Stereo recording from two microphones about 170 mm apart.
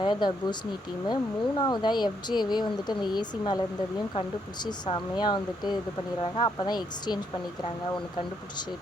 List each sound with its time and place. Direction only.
0.0 s speech: 25° left (ahead or behind)
4.6 s speech: 25° left (ahead or behind)